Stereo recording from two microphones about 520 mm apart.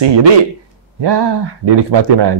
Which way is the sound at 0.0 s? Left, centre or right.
Right.